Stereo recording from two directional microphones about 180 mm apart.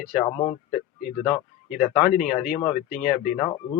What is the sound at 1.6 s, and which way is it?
Speech, 40° left (ahead or behind).